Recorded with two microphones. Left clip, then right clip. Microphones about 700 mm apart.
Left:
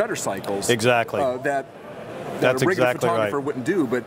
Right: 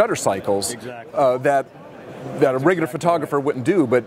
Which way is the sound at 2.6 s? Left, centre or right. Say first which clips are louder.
Right 2 dB; right.